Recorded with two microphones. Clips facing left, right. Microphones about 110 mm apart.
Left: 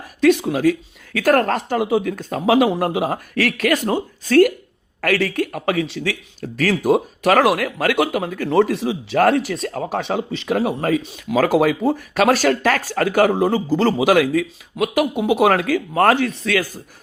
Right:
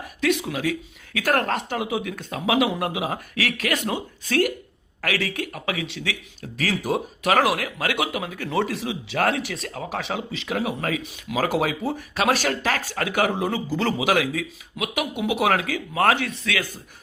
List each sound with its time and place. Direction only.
0.2 s speech: 35° left (ahead or behind)